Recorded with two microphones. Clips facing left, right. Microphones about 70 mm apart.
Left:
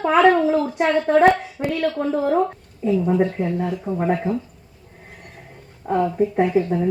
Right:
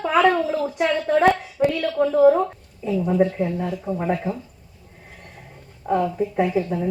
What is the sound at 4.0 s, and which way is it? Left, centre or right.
Speech, left.